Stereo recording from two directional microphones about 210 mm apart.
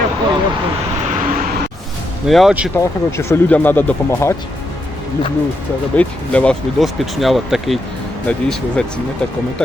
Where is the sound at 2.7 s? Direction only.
10° left (ahead or behind).